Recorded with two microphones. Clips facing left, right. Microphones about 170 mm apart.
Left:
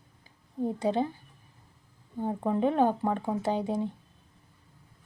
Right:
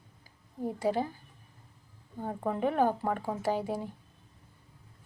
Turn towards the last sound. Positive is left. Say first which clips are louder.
# left 2 dB
turn(degrees=25)  # may be behind; listen again after turning